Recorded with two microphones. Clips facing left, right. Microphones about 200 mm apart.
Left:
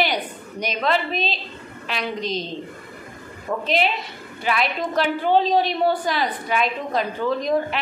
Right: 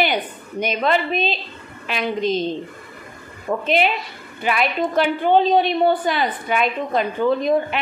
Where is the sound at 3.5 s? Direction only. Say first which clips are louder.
Right 3 dB; 15° right (ahead or behind).